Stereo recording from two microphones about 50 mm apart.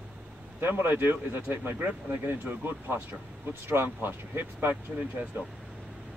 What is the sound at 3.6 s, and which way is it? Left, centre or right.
Speech, right.